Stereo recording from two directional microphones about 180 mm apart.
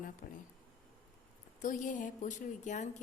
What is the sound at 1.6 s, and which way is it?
Speech, 45° left (ahead or behind).